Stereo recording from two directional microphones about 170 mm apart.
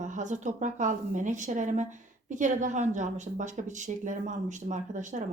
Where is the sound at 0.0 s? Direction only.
45° right (ahead or behind).